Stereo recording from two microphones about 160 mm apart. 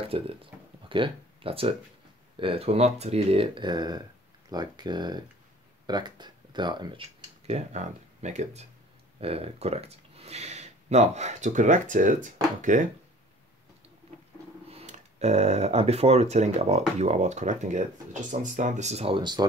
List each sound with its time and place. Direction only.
0.1 s speech: 35° right (ahead or behind); by 12.9 s 55° right (ahead or behind)
14.7 s speech: 40° right (ahead or behind)